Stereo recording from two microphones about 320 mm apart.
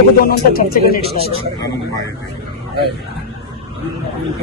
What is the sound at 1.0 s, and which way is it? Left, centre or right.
Speech, centre.